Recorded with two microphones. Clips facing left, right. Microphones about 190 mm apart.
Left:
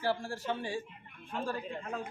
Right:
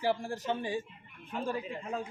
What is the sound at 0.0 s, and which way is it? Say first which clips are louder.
Speech: right 2 dB; 15° right (ahead or behind).